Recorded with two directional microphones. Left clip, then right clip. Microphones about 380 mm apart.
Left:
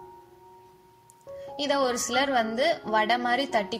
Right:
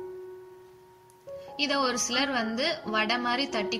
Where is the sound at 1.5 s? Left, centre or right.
Centre.